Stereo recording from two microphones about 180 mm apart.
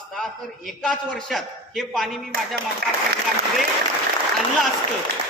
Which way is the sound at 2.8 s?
60° right (ahead or behind).